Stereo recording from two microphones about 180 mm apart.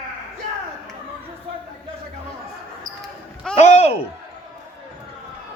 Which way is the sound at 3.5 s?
35° left (ahead or behind).